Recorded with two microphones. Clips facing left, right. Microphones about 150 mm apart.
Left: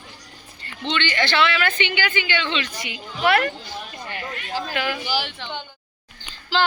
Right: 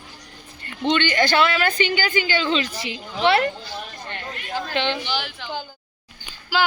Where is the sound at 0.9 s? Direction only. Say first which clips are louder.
Right 4 dB; 50° right (ahead or behind); by 3.5 s 25° right (ahead or behind).